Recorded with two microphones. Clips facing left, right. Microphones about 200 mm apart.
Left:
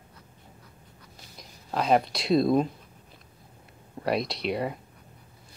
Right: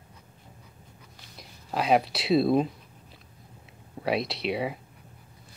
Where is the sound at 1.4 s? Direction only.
5° right (ahead or behind).